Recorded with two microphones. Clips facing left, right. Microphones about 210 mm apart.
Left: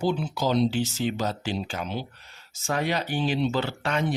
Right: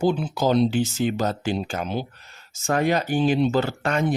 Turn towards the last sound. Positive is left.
turn(degrees=-50)  # may be behind; listen again after turning